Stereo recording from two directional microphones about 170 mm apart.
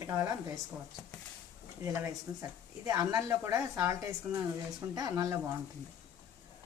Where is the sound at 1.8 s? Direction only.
20° right (ahead or behind).